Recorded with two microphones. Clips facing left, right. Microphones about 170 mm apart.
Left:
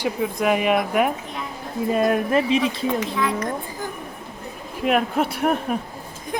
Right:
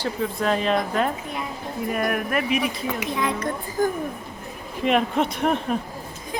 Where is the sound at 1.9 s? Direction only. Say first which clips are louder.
Left 6 dB; 25° left (ahead or behind).